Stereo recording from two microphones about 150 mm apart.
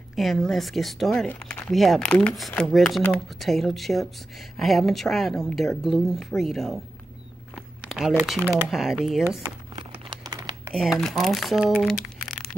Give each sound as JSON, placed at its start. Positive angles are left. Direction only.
{"t": 0.1, "sound": "speech", "side_deg": 0}
{"t": 7.5, "sound": "a sound", "side_deg": 0}
{"t": 8.3, "sound": "speech", "side_deg": 0}
{"t": 9.8, "sound": "crumpling", "side_deg": -30}
{"t": 10.7, "sound": "speech", "side_deg": 0}